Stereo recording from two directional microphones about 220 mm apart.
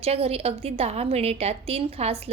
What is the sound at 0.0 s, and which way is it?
A woman's voice, 25° right (ahead or behind).